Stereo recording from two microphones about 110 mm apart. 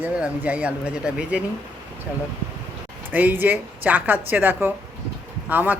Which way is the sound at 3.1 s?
15° right (ahead or behind).